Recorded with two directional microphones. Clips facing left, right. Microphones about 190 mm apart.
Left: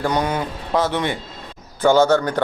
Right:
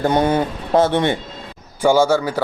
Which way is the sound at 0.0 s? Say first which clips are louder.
Right 5 dB; 25° right (ahead or behind).